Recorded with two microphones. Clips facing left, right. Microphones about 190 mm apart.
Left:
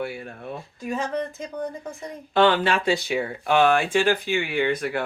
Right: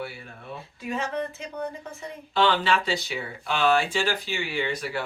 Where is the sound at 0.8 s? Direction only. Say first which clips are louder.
Left 2 dB; 40° left (ahead or behind).